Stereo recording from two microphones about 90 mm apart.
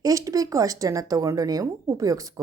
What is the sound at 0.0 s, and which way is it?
Speech, 40° right (ahead or behind).